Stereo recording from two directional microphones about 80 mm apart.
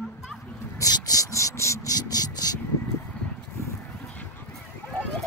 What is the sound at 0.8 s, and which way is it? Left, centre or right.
Speech, left.